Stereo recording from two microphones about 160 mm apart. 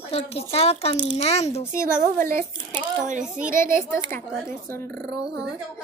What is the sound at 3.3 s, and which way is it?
Speech, 55° right (ahead or behind).